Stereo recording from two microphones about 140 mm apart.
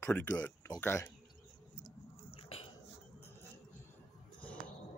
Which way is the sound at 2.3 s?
40° left (ahead or behind).